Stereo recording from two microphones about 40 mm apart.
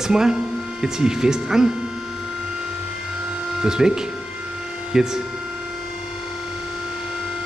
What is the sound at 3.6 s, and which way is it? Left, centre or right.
Speech, centre.